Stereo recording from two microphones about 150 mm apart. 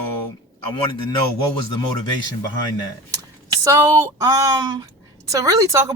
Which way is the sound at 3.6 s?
20° right (ahead or behind).